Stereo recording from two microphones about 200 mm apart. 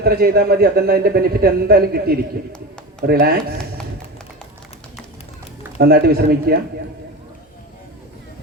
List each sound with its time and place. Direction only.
0.0 s a man's voice: 50° right (ahead or behind)
5.8 s a man's voice: 50° right (ahead or behind)